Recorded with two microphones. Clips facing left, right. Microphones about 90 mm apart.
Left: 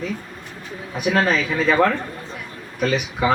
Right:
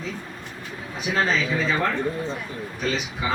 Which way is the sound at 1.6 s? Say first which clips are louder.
Left 11 dB; 75° left (ahead or behind).